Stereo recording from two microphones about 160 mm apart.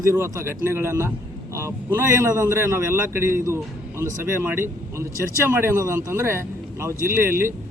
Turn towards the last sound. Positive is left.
turn(degrees=-15)  # may be behind; listen again after turning